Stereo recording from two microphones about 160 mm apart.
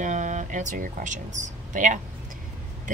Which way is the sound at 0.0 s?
50° right (ahead or behind).